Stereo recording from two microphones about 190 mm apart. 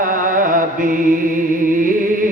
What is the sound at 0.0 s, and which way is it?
Mantra, 45° right (ahead or behind).